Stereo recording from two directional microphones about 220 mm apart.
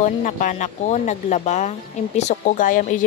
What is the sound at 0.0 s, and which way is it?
Speech, 35° left (ahead or behind).